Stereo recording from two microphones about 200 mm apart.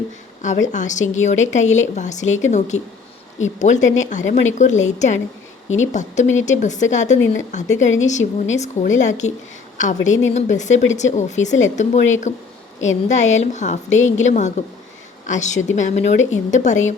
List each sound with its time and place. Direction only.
0.4 s a woman's voice: 35° left (ahead or behind)